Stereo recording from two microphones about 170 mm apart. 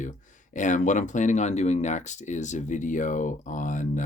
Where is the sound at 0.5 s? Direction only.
45° left (ahead or behind).